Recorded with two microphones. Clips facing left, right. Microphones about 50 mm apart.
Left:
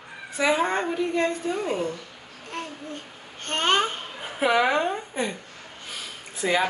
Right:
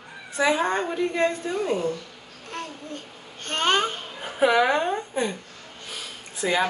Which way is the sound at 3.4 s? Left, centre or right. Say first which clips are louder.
Even; centre.